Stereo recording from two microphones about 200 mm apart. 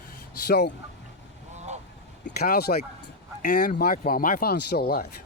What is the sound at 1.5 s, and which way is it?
Vehicle, 35° right (ahead or behind).